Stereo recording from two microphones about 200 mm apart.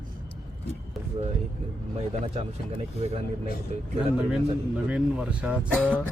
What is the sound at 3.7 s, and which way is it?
Speech, 35° right (ahead or behind).